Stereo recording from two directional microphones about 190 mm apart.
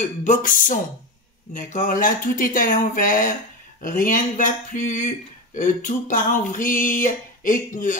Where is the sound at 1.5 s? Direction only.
40° left (ahead or behind).